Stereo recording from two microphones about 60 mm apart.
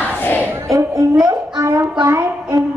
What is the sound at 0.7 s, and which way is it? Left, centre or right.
Speech, right.